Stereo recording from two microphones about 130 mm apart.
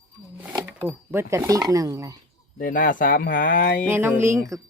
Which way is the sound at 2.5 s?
90° left.